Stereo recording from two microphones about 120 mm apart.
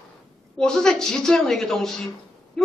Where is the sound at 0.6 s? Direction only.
5° left (ahead or behind).